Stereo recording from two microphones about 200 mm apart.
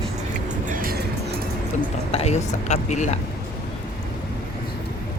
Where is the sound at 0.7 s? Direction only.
45° right (ahead or behind).